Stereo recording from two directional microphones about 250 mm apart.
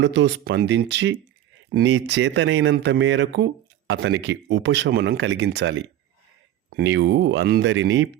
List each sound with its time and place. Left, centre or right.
0.0 s speech: right